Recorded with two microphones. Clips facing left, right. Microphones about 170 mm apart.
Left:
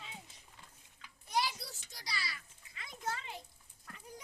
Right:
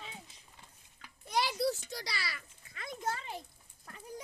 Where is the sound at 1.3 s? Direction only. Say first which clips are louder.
Right 5 dB; 70° right (ahead or behind).